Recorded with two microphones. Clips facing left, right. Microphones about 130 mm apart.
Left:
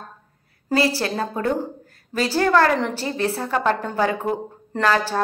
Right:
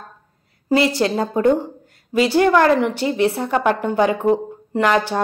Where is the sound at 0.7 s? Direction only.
20° right (ahead or behind).